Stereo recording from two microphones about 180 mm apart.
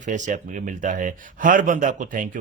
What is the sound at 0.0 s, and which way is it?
A man's voice, 45° right (ahead or behind).